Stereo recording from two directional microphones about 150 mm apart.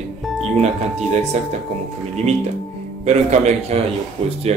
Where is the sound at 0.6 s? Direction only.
45° right (ahead or behind).